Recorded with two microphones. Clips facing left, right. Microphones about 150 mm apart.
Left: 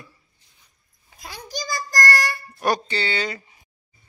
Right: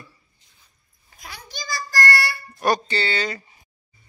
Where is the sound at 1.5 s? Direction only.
40° left (ahead or behind).